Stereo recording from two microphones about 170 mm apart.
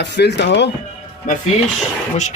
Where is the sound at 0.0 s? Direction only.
90° left.